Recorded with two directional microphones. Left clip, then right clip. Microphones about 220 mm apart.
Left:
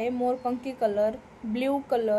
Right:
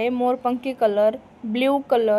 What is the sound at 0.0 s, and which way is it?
A woman's voice, 10° right (ahead or behind).